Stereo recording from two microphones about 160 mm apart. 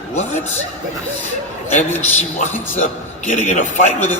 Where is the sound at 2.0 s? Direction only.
50° left (ahead or behind).